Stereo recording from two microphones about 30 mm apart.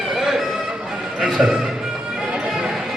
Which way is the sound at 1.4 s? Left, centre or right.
Centre.